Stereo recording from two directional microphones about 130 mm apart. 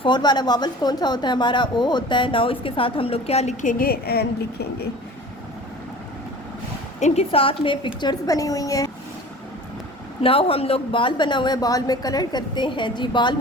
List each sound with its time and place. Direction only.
0.0 s a woman's voice: 35° left (ahead or behind); by 3.8 s 80° left
7.0 s a woman's voice: 50° left (ahead or behind)
8.3 s a woman's voice: 25° left (ahead or behind)
10.2 s a woman's voice: 45° left (ahead or behind)